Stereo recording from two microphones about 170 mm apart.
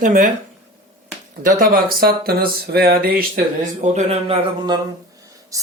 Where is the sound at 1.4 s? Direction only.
55° right (ahead or behind); by 4.8 s 30° right (ahead or behind).